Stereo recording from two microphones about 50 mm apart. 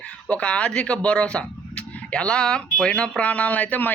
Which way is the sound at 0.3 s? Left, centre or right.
Left.